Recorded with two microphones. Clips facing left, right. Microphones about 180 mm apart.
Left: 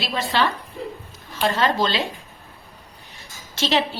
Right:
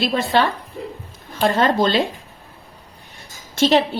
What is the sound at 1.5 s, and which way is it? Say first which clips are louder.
Speech: right 5 dB; 50° right (ahead or behind).